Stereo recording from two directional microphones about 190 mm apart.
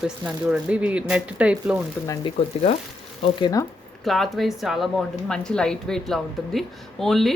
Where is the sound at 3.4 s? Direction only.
20° left (ahead or behind).